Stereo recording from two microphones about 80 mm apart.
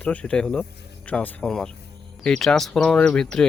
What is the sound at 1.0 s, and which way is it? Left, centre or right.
Speech, centre.